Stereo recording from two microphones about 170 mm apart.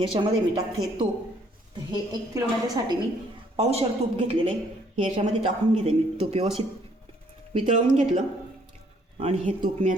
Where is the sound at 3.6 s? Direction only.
35° right (ahead or behind).